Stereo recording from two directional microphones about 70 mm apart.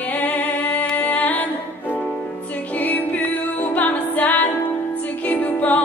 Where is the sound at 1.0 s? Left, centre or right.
Left.